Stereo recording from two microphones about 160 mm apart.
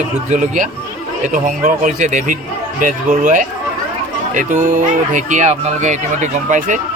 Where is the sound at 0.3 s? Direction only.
55° right (ahead or behind).